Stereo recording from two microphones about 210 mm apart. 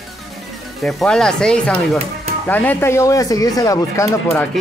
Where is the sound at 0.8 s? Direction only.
Centre (ahead or behind).